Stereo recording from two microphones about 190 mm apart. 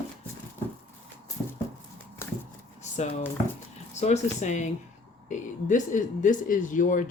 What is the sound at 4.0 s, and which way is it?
Speech, 40° left (ahead or behind).